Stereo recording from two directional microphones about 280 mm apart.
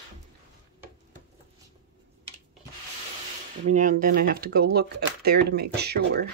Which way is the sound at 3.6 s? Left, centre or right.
Right.